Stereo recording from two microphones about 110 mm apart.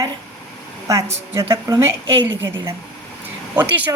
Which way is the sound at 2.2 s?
20° right (ahead or behind).